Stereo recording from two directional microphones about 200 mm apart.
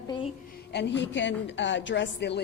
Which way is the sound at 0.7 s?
60° left (ahead or behind).